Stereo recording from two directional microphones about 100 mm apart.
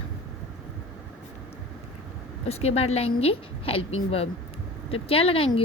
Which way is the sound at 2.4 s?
90° left.